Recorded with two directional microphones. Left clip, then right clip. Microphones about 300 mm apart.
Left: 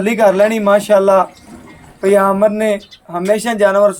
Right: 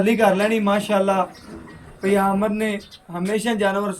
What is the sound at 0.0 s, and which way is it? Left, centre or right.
Speech, centre.